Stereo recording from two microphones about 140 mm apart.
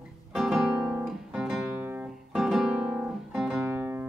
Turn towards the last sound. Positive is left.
turn(degrees=-15)  # may be behind; listen again after turning